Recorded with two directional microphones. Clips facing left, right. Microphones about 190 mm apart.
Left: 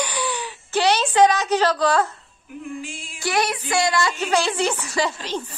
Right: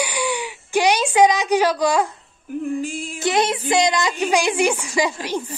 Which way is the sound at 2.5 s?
45° right (ahead or behind).